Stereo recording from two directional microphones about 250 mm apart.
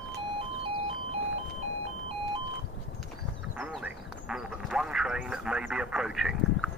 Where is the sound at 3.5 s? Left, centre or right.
Centre.